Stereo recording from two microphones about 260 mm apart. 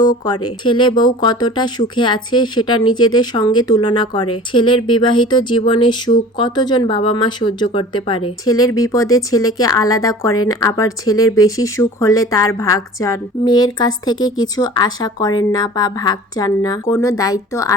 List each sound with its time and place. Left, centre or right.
0.4 s a woman's voice: centre